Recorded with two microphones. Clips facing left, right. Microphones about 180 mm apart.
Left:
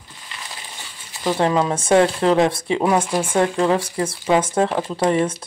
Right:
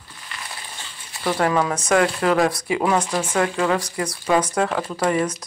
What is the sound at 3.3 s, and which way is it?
Speech, 25° left (ahead or behind).